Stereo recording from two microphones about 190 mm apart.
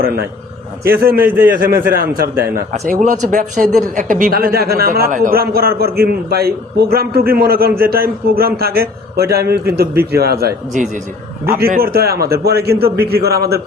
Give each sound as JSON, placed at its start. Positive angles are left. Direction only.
{"t": 0.9, "sound": "speech", "side_deg": -50}
{"t": 1.2, "sound": "a man's voice", "side_deg": -10}
{"t": 1.9, "sound": "a man's voice", "side_deg": -50}